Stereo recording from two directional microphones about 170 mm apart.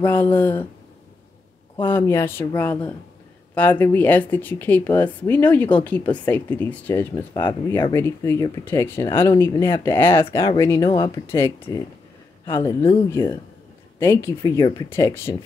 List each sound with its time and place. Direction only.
0.0 s speech: 10° left (ahead or behind)
1.8 s speech: 10° left (ahead or behind)